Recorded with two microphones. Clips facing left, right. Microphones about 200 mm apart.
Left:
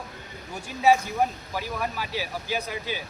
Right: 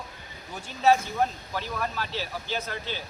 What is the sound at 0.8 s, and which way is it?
Speech, 10° left (ahead or behind).